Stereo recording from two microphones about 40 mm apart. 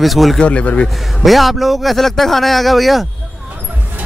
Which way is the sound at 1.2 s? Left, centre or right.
Centre.